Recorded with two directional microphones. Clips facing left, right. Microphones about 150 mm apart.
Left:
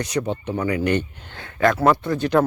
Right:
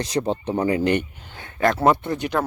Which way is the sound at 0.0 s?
30° right (ahead or behind).